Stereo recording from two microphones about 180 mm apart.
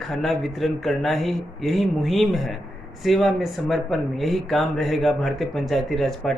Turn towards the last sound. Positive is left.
turn(degrees=0)  # may be behind; listen again after turning